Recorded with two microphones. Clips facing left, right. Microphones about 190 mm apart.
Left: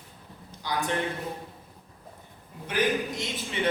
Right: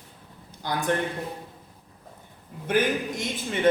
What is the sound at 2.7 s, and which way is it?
A man's voice, 50° right (ahead or behind).